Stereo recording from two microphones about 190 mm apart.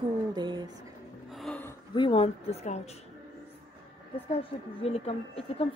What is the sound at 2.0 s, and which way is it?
Speech, 30° left (ahead or behind).